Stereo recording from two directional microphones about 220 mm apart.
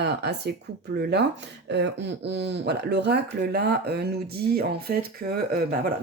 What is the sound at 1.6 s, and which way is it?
Speech, 50° right (ahead or behind).